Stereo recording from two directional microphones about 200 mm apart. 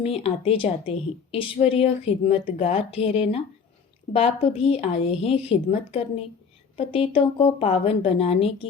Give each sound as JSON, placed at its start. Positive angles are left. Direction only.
{"t": 0.0, "sound": "a woman's voice", "side_deg": 30}
{"t": 6.7, "sound": "a woman's voice", "side_deg": 30}